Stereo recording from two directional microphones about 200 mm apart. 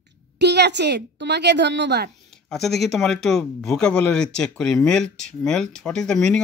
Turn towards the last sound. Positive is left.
turn(degrees=5)  # may be behind; listen again after turning